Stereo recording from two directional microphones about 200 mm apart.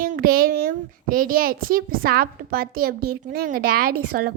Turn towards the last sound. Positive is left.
turn(degrees=-45)  # may be behind; listen again after turning